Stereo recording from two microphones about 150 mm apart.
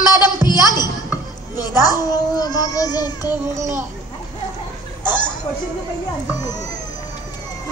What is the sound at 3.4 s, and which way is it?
Speech, 20° right (ahead or behind).